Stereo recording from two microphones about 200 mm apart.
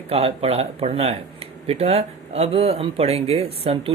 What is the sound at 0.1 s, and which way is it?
Speech, 30° right (ahead or behind).